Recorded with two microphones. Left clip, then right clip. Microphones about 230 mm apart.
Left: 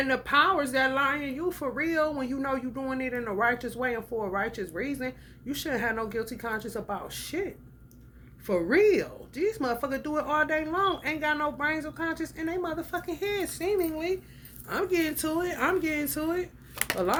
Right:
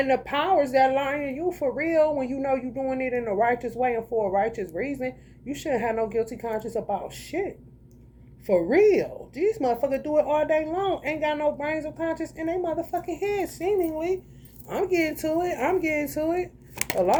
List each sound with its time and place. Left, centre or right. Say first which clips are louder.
0.1 s speech: left 1 dB; left
1.2 s a woman's voice: right 5 dB; centre